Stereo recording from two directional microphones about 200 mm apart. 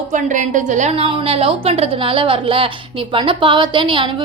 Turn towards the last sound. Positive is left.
turn(degrees=-25)  # may be behind; listen again after turning